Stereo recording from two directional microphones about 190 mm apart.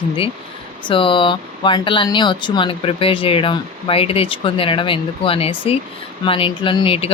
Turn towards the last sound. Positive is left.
turn(degrees=30)  # may be behind; listen again after turning